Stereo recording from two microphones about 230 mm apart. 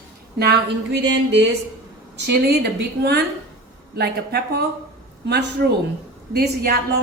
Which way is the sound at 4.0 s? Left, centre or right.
Right.